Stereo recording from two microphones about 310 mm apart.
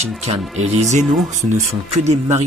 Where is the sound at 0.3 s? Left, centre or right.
Right.